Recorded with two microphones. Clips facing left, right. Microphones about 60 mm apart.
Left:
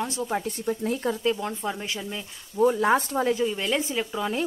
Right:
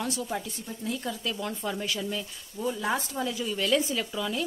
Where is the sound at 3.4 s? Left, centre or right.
Left.